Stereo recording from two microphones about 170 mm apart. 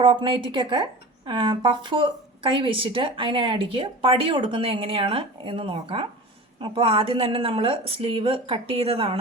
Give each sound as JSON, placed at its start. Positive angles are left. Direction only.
{"t": 0.0, "sound": "a woman's voice", "side_deg": -30}